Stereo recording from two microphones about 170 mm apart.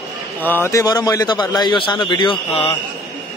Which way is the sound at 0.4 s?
10° left (ahead or behind).